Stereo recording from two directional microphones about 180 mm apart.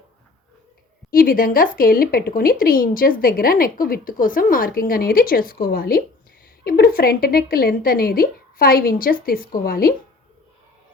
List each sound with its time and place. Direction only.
1.1 s a woman's voice: 50° left (ahead or behind)